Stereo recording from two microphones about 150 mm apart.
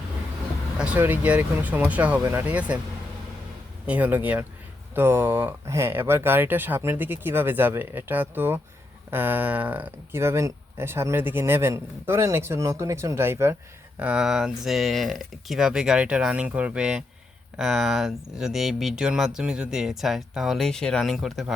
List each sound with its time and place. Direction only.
0.8 s speech: 10° right (ahead or behind)
3.8 s speech: 10° right (ahead or behind)